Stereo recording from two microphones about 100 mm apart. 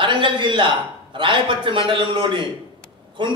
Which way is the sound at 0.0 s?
50° right (ahead or behind).